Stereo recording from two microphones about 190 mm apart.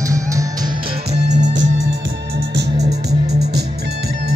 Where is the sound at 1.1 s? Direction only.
40° right (ahead or behind).